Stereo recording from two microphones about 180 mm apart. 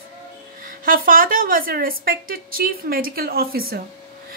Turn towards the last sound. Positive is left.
turn(degrees=-55)  # may be behind; listen again after turning